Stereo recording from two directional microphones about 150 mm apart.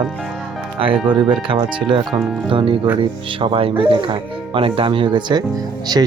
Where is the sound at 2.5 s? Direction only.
35° right (ahead or behind).